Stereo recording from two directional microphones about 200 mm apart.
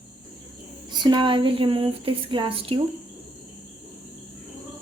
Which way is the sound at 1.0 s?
25° right (ahead or behind).